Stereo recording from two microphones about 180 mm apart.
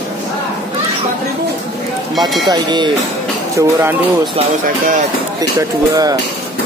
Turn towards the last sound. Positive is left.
turn(degrees=-20)  # may be behind; listen again after turning